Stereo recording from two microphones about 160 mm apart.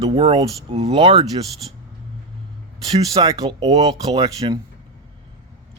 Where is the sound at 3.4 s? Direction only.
40° right (ahead or behind).